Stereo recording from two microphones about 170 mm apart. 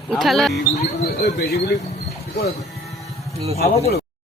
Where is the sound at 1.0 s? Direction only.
70° left (ahead or behind).